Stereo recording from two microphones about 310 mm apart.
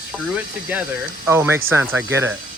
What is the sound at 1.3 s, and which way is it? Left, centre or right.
Speech, centre.